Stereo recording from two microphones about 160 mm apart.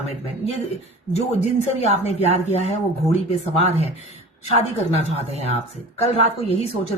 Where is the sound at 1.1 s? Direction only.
40° left (ahead or behind).